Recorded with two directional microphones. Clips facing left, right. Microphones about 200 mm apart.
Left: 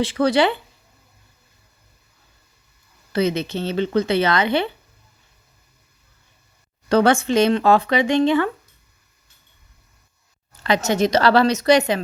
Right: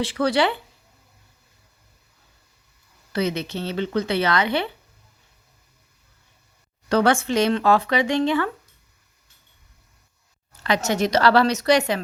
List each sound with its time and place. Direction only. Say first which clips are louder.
0.0 s speech: left 3 dB; 20° left (ahead or behind)
3.1 s speech: left 4 dB; 25° left (ahead or behind)
6.8 s speech: left 3 dB; 25° left (ahead or behind)
10.6 s speech: left 3 dB; 25° left (ahead or behind)